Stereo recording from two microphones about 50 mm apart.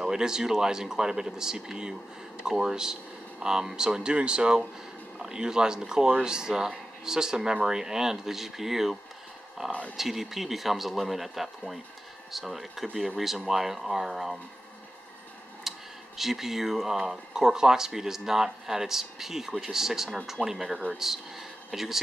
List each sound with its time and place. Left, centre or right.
0.0 s speech: centre
9.7 s speech: left
9.9 s speech: centre
15.7 s a sound: centre
16.2 s speech: centre